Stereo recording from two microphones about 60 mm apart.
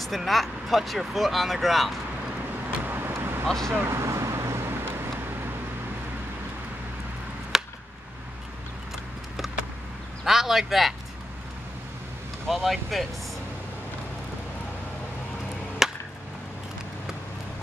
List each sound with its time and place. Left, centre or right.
0.0 s speech: centre
2.8 s vehicle: right
3.4 s speech: centre
3.9 s vehicle: right
7.5 s a sound: centre
10.2 s speech: centre
12.4 s speech: centre
15.8 s chop: centre